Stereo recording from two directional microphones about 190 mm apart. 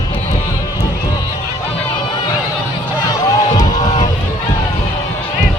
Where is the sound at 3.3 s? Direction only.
20° left (ahead or behind).